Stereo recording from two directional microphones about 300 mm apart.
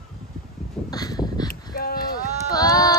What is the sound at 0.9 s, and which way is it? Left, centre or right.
Crow, centre.